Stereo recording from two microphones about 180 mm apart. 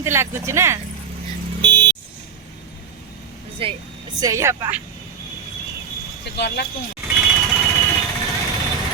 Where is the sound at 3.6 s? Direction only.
30° right (ahead or behind).